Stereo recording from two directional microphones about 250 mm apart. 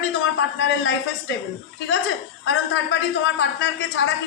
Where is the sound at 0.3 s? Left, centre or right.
Left.